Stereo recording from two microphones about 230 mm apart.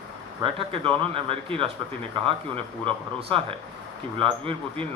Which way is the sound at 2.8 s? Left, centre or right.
Right.